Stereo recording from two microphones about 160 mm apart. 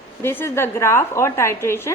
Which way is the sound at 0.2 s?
15° left (ahead or behind).